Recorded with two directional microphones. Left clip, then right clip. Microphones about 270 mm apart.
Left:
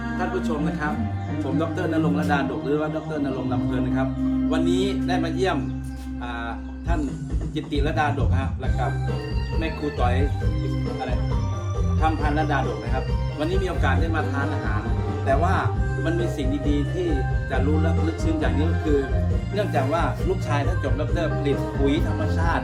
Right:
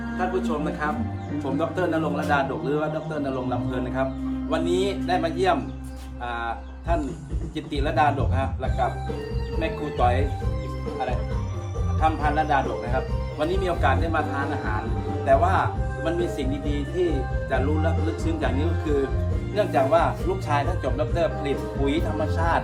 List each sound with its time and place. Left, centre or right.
0.2 s speech: centre
7.5 s speech: centre
11.9 s speech: centre
19.5 s speech: centre